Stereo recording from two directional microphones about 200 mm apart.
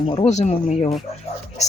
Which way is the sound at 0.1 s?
30° left (ahead or behind).